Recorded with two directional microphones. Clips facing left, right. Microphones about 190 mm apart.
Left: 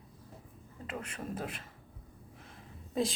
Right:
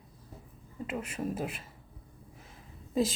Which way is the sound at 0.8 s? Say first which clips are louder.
Right 6 dB; 5° right (ahead or behind).